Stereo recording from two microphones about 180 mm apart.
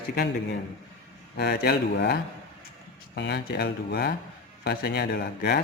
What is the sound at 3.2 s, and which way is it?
Speech, 65° left (ahead or behind).